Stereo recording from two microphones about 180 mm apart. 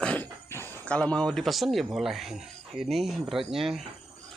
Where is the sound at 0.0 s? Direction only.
10° left (ahead or behind).